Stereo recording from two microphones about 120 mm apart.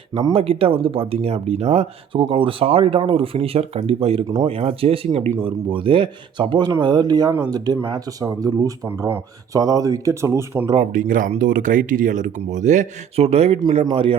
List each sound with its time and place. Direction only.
0.3 s speech: 55° right (ahead or behind); by 10.7 s 25° right (ahead or behind)
10.9 s speech: 90° right; by 13.6 s 60° right (ahead or behind)
13.8 s speech: 50° right (ahead or behind)